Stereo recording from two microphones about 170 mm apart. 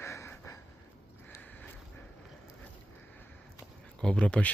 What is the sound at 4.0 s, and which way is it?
Speech, 5° left (ahead or behind).